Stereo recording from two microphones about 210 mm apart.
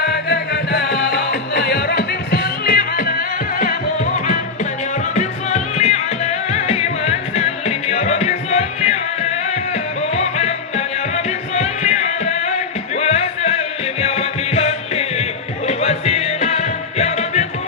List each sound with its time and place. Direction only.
0.0 s music: 55° left (ahead or behind); by 9.0 s 30° left (ahead or behind)
10.2 s music: 30° left (ahead or behind)